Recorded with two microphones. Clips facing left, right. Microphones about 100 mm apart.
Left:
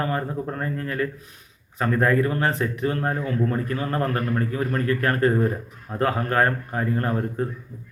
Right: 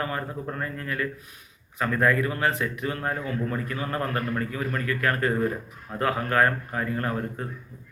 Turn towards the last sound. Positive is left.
turn(degrees=30)  # may be behind; listen again after turning